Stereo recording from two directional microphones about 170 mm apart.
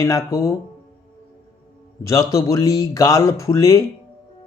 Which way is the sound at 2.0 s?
20° left (ahead or behind).